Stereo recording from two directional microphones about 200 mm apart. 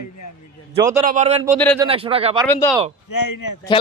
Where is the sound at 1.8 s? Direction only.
25° right (ahead or behind).